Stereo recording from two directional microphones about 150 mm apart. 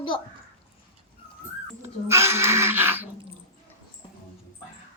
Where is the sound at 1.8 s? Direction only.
15° right (ahead or behind).